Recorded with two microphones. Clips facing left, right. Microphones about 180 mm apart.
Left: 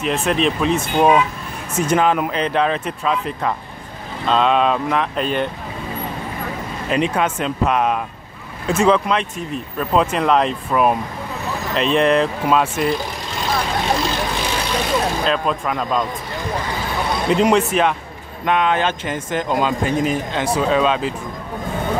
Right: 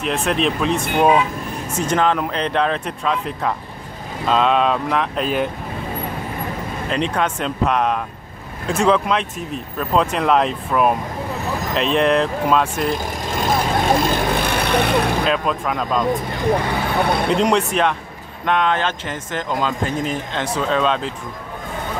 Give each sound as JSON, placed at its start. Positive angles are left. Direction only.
{"t": 0.0, "sound": "speech", "side_deg": 0}
{"t": 6.9, "sound": "speech", "side_deg": 5}
{"t": 12.9, "sound": "vehicle", "side_deg": -50}
{"t": 15.2, "sound": "speech", "side_deg": 0}
{"t": 17.0, "sound": "speech", "side_deg": -60}
{"t": 17.3, "sound": "speech", "side_deg": 5}